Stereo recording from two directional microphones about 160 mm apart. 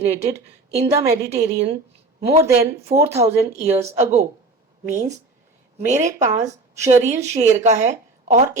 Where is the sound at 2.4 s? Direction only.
20° right (ahead or behind).